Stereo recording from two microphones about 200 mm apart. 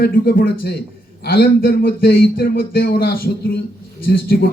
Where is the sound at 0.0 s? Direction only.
45° left (ahead or behind).